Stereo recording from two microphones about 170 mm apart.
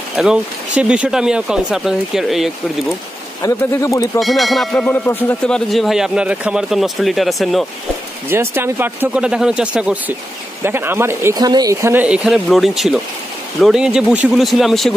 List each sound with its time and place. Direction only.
0.1 s speech: 5° right (ahead or behind)
3.4 s speech: 15° left (ahead or behind)
4.2 s speech: centre (ahead or behind)
8.3 s speech: 15° right (ahead or behind)